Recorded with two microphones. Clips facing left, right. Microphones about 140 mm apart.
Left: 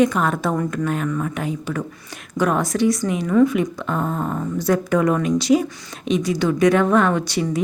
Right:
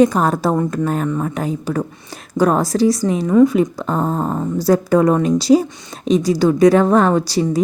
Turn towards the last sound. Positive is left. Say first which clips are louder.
# right 5 dB
turn(degrees=-35)  # may be behind; listen again after turning